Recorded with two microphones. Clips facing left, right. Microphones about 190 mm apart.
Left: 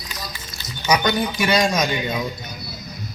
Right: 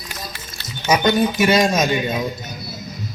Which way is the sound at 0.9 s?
25° right (ahead or behind).